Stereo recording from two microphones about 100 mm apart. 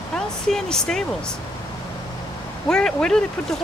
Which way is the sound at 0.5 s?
5° left (ahead or behind).